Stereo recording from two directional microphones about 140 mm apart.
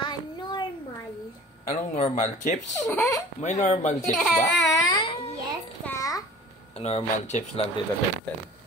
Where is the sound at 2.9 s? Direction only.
20° left (ahead or behind).